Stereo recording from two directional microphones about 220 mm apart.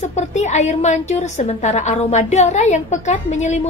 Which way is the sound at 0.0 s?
30° left (ahead or behind).